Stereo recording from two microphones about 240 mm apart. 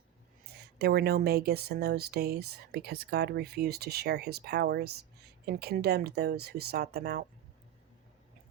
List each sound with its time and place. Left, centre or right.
0.4 s speech: right